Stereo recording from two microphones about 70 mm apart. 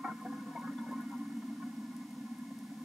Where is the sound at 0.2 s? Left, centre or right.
Centre.